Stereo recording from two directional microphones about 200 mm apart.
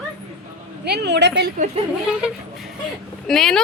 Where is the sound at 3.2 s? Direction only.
Centre (ahead or behind).